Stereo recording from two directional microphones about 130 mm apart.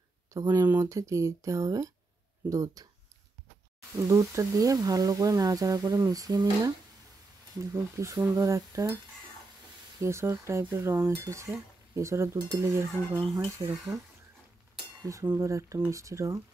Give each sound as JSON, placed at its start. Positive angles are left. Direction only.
{"t": 0.3, "sound": "speech", "side_deg": -25}
{"t": 4.1, "sound": "speech", "side_deg": -25}
{"t": 9.9, "sound": "speech", "side_deg": -20}
{"t": 15.0, "sound": "speech", "side_deg": -20}